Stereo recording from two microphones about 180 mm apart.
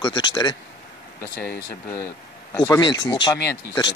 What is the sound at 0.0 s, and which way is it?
Speech, 25° left (ahead or behind).